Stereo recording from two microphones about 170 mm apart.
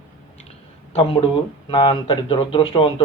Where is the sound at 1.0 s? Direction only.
30° left (ahead or behind).